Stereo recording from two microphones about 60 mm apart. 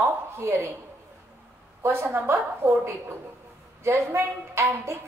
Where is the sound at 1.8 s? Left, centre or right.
Right.